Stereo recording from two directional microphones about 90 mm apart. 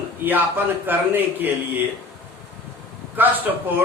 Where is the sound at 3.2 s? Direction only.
20° right (ahead or behind).